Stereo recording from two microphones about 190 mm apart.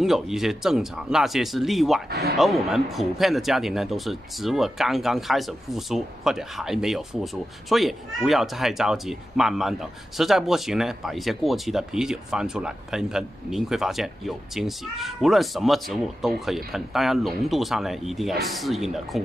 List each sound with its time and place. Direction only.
0.0 s speech: centre (ahead or behind)
2.0 s speech: 55° right (ahead or behind)
2.3 s speech: centre (ahead or behind)